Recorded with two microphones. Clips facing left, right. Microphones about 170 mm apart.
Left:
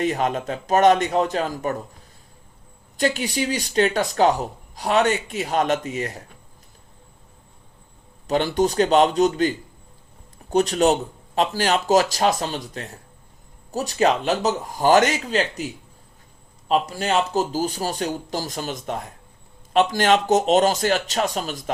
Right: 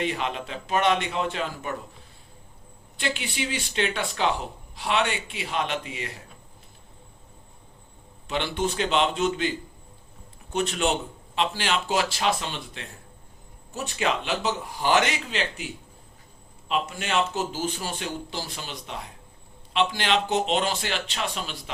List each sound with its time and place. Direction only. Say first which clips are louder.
0.0 s speech: left 6 dB; 45° left (ahead or behind)
3.0 s speech: left 7 dB; 40° left (ahead or behind)
8.3 s speech: left 7 dB; 40° left (ahead or behind)
10.5 s speech: left 7 dB; 40° left (ahead or behind)